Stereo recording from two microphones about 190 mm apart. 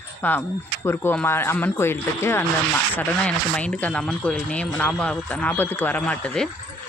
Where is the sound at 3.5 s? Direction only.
5° left (ahead or behind).